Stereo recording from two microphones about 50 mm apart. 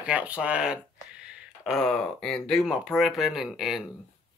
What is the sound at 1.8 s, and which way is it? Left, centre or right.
Speech, centre.